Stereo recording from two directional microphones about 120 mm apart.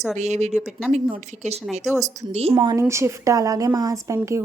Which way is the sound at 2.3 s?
60° right (ahead or behind).